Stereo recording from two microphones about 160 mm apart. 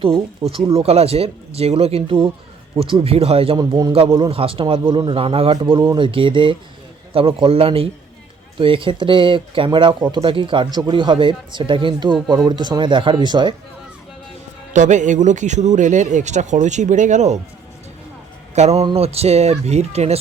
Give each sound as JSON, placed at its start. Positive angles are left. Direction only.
{"t": 0.0, "sound": "speech", "side_deg": -35}
{"t": 4.3, "sound": "a man's voice", "side_deg": -35}
{"t": 14.7, "sound": "speech", "side_deg": -50}
{"t": 18.5, "sound": "speech", "side_deg": -45}